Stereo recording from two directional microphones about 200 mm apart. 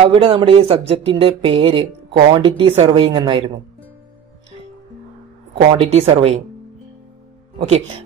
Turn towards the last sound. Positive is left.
turn(degrees=-30)  # may be behind; listen again after turning